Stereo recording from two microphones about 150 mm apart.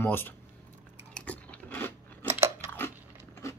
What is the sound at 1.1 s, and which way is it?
Biting, 10° left (ahead or behind).